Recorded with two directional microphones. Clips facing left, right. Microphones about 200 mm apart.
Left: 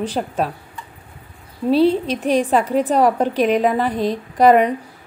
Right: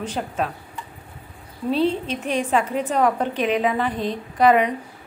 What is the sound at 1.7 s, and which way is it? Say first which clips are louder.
A woman's voice: left 6 dB; 35° left (ahead or behind).